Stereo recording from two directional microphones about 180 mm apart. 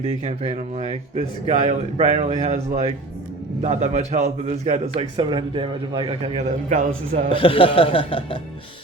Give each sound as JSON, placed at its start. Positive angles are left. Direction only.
{"t": 0.3, "sound": "a man's voice", "side_deg": -40}
{"t": 6.7, "sound": "a man's voice", "side_deg": -45}
{"t": 7.3, "sound": "speech", "side_deg": 30}